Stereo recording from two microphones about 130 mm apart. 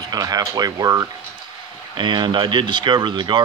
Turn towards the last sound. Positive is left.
turn(degrees=-35)  # may be behind; listen again after turning